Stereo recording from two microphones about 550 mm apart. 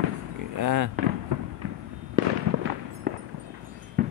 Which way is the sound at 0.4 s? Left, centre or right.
Right.